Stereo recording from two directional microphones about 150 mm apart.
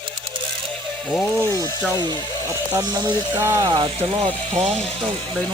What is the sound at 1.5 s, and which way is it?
Speech, 20° left (ahead or behind).